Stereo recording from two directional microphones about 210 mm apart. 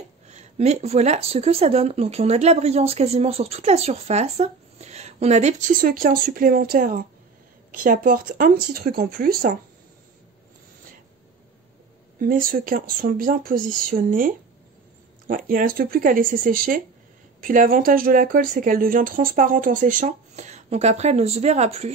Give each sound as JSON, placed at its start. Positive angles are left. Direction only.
{"t": 0.3, "sound": "speech", "side_deg": -30}
{"t": 12.2, "sound": "speech", "side_deg": -40}